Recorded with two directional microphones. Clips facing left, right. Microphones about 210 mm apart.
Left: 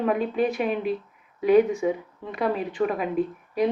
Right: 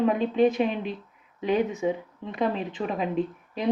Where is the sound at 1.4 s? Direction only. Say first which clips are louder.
Left 6 dB; 20° right (ahead or behind).